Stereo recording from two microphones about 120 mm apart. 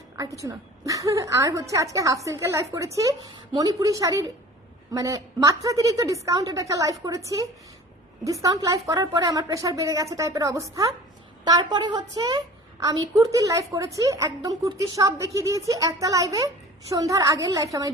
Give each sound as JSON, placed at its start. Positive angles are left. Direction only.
{"t": 0.2, "sound": "a woman's voice", "side_deg": -30}
{"t": 8.2, "sound": "a woman's voice", "side_deg": -25}